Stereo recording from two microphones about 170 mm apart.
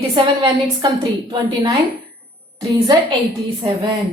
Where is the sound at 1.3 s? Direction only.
25° right (ahead or behind).